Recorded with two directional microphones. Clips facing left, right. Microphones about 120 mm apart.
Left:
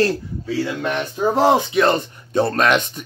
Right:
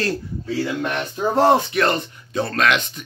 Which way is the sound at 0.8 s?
5° left (ahead or behind).